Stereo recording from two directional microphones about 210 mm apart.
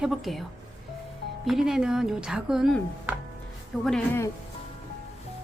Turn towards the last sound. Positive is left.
turn(degrees=5)  # may be behind; listen again after turning